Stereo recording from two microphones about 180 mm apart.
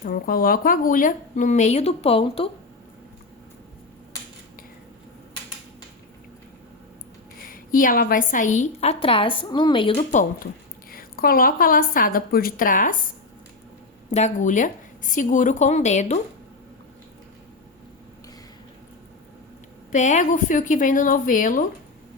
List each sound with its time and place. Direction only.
0.0 s a woman's voice: 55° left (ahead or behind); by 2.5 s 30° left (ahead or behind)
7.5 s a woman's voice: 50° left (ahead or behind)
10.9 s a woman's voice: 55° left (ahead or behind)
14.1 s a woman's voice: 40° left (ahead or behind)
19.9 s a woman's voice: 40° left (ahead or behind)